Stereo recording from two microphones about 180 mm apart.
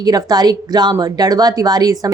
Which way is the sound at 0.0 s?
20° right (ahead or behind).